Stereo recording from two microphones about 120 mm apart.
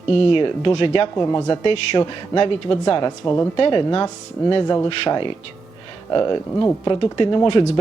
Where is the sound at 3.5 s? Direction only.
50° left (ahead or behind).